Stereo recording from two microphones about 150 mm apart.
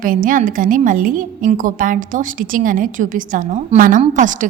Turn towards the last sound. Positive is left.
turn(degrees=-55)  # may be behind; listen again after turning